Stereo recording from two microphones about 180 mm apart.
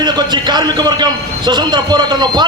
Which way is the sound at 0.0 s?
25° right (ahead or behind).